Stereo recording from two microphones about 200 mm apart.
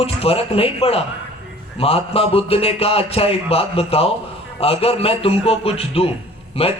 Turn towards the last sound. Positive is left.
turn(degrees=30)  # may be behind; listen again after turning